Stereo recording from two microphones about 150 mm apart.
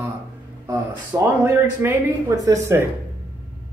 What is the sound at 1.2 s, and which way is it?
Speech, 15° right (ahead or behind).